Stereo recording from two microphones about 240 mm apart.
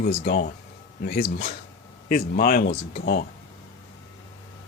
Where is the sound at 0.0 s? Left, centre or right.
Left.